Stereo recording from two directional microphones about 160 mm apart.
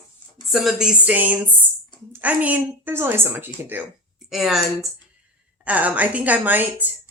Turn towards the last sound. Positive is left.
turn(degrees=-10)  # may be behind; listen again after turning